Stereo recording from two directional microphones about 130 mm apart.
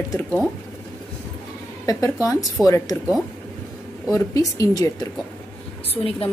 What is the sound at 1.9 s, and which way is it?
A woman's voice, 25° left (ahead or behind).